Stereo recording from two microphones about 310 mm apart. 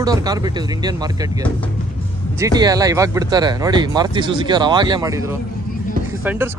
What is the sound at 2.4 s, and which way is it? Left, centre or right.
Speech, centre.